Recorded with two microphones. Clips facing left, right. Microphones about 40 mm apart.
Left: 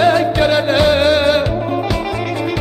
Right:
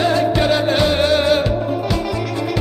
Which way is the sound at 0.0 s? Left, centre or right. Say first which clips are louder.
Left 3 dB; left.